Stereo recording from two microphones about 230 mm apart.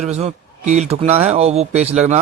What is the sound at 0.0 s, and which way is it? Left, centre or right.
Speech, right.